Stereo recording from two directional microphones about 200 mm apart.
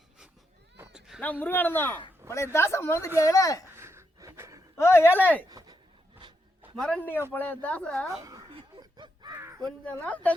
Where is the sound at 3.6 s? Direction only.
10° right (ahead or behind).